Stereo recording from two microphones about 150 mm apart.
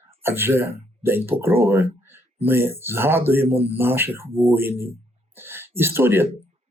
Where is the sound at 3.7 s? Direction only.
15° right (ahead or behind).